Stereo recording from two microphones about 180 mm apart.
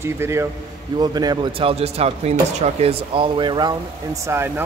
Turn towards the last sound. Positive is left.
turn(degrees=-15)  # may be behind; listen again after turning